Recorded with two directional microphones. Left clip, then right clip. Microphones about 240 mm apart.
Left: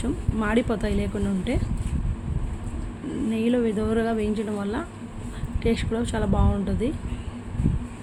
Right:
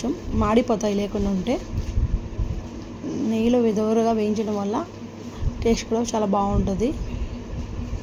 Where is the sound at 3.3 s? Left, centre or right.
Centre.